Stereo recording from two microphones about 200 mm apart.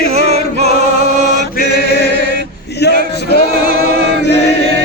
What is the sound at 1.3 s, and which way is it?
Chant, 45° left (ahead or behind).